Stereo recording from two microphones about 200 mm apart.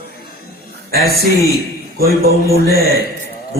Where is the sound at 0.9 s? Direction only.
50° right (ahead or behind).